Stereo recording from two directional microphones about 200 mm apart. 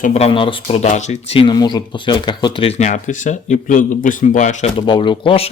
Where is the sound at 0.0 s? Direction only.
30° left (ahead or behind).